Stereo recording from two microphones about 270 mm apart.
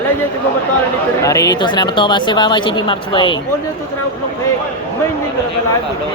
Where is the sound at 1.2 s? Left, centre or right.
Centre.